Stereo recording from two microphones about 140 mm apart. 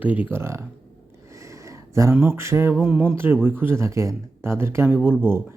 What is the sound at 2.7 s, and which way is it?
Speech, 5° right (ahead or behind).